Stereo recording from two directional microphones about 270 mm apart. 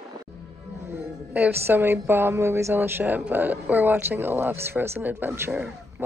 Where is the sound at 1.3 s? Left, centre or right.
Centre.